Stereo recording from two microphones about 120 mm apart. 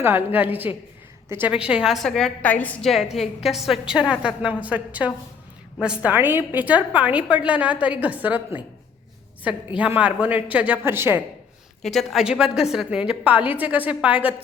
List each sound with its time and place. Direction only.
0.0 s a woman's voice: 15° right (ahead or behind); by 2.7 s 15° left (ahead or behind)
2.8 s a woman's voice: centre (ahead or behind); by 11.2 s 20° right (ahead or behind)
11.8 s a woman's voice: centre (ahead or behind)